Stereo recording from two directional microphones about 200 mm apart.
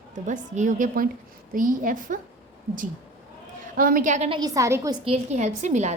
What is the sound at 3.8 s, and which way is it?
Speech, 45° right (ahead or behind).